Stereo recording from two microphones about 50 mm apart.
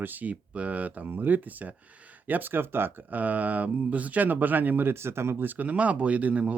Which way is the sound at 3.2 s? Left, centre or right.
Right.